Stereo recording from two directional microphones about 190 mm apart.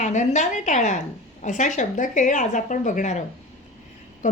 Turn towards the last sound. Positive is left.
turn(degrees=40)  # may be behind; listen again after turning